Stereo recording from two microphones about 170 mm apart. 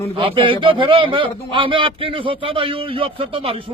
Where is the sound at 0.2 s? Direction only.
30° right (ahead or behind).